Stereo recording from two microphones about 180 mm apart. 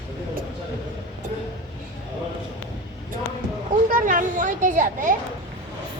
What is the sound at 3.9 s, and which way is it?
Children playing, 45° right (ahead or behind).